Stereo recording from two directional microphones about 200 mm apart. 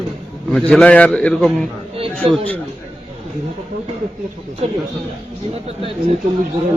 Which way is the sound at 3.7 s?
40° right (ahead or behind).